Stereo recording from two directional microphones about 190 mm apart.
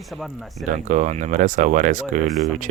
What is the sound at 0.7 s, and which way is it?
Speech, 40° right (ahead or behind).